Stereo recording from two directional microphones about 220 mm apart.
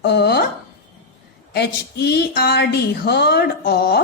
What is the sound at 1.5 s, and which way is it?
A woman's voice, 50° left (ahead or behind).